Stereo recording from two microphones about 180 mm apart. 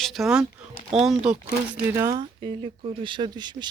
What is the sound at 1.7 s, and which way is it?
Speech, 15° right (ahead or behind).